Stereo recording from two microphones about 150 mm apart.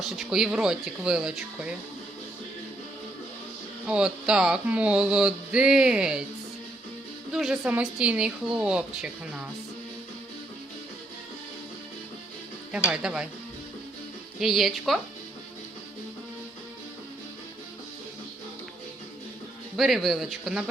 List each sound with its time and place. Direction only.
0.0 s a woman's voice: centre (ahead or behind)
3.8 s a sound: 5° right (ahead or behind)
7.3 s a woman's voice: 5° right (ahead or behind)
12.7 s a woman's voice: 5° right (ahead or behind)
14.3 s a woman's voice: centre (ahead or behind)
19.7 s a woman's voice: centre (ahead or behind)